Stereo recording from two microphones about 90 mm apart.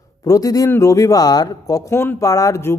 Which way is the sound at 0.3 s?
40° left (ahead or behind).